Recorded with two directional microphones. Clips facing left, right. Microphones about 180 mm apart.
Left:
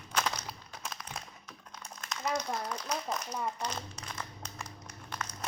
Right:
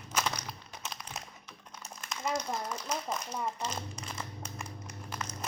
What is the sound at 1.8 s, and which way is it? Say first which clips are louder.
Speech: even; 5° right (ahead or behind).